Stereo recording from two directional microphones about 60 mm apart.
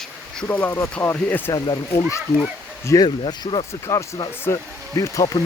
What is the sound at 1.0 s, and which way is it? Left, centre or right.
Speech, left.